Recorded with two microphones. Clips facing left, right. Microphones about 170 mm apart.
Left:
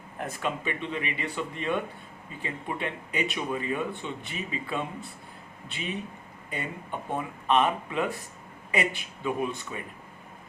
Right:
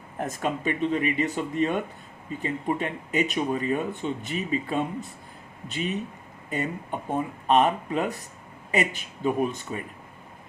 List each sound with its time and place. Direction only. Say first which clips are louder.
0.3 s speech: right 4 dB; 40° right (ahead or behind)
6.5 s speech: right 5 dB; 45° right (ahead or behind)